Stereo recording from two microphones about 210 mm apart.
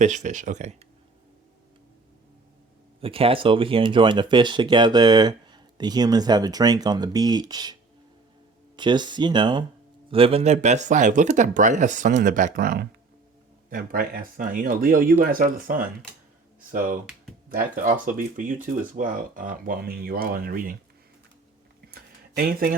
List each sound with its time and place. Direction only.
0.0 s speech: 35° right (ahead or behind)
3.0 s speech: 25° right (ahead or behind); by 20.7 s 40° right (ahead or behind)
21.9 s a sound: 45° right (ahead or behind)